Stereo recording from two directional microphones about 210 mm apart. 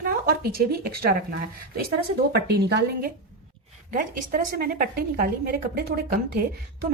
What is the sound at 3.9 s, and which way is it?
Speech, 40° right (ahead or behind).